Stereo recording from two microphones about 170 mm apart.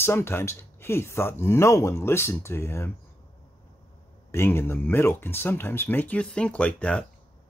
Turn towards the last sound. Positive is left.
turn(degrees=5)  # may be behind; listen again after turning